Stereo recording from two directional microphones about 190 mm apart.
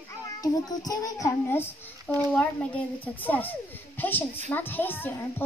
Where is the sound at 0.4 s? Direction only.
20° left (ahead or behind).